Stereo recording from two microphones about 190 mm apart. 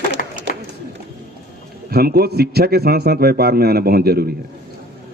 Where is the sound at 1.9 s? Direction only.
55° right (ahead or behind).